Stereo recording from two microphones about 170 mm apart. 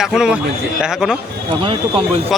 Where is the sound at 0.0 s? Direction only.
5° right (ahead or behind).